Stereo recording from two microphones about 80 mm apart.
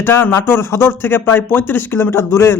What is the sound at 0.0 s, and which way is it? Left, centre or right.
Speech, left.